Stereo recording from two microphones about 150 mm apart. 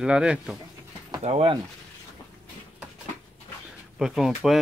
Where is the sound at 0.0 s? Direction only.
5° right (ahead or behind).